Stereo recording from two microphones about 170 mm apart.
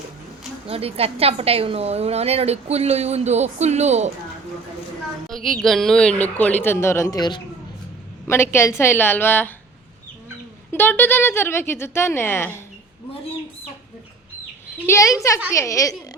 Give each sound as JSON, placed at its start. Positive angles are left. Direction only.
{"t": 0.7, "sound": "a woman's voice", "side_deg": -35}
{"t": 5.3, "sound": "child singing", "side_deg": 0}
{"t": 5.6, "sound": "speech", "side_deg": 0}
{"t": 8.3, "sound": "speech", "side_deg": 15}
{"t": 10.7, "sound": "speech", "side_deg": 10}
{"t": 14.8, "sound": "a woman's voice", "side_deg": 20}